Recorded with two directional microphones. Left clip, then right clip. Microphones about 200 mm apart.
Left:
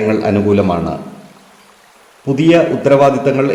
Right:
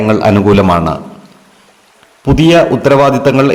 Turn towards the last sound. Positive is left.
turn(degrees=-50)  # may be behind; listen again after turning